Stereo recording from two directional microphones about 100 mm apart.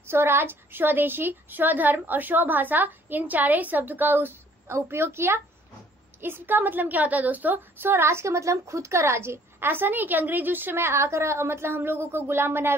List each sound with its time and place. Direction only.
0.0 s a woman's voice: 25° right (ahead or behind)